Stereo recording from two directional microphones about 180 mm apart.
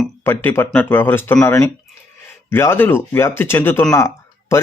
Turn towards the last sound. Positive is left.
turn(degrees=15)  # may be behind; listen again after turning